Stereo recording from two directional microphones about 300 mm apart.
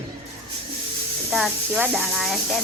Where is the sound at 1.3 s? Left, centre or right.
Centre.